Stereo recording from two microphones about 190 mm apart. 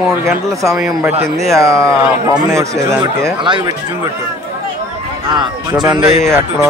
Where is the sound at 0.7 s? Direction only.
Centre (ahead or behind).